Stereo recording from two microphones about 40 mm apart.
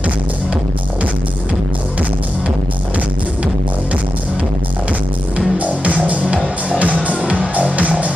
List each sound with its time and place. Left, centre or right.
5.7 s music: right